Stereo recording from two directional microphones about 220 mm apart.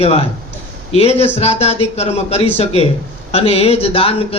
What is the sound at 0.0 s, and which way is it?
Speech, 25° left (ahead or behind).